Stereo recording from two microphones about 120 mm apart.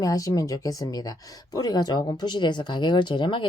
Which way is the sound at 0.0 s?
30° left (ahead or behind).